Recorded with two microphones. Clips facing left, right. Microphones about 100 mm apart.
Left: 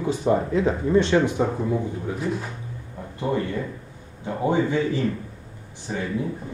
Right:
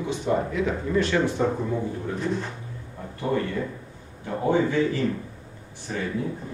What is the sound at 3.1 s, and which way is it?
Speech, 20° left (ahead or behind).